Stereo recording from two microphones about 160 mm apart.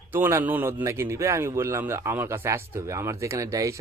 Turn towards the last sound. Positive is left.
turn(degrees=-20)  # may be behind; listen again after turning